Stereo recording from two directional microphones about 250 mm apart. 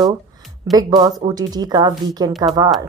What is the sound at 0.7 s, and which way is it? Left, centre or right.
Speech, centre.